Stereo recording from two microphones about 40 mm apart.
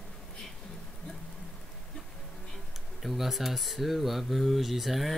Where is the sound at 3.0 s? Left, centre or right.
Centre.